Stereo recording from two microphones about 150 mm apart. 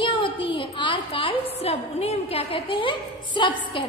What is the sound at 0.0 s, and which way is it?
A woman's voice, 35° left (ahead or behind).